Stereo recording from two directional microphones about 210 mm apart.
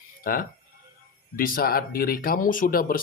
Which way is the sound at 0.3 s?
45° left (ahead or behind).